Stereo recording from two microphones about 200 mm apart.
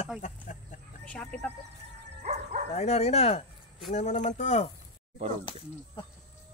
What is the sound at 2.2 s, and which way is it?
Bow-wow, 35° right (ahead or behind).